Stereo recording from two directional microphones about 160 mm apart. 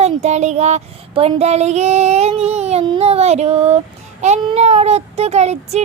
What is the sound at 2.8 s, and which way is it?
Speech, 35° right (ahead or behind).